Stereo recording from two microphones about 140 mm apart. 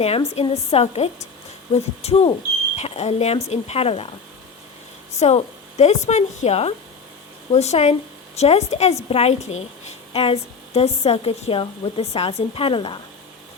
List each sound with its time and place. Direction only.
0.3 s a woman's voice: 50° left (ahead or behind)
5.2 s a woman's voice: 50° left (ahead or behind)